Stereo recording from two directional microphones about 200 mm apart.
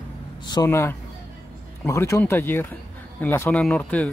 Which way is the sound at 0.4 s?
20° left (ahead or behind).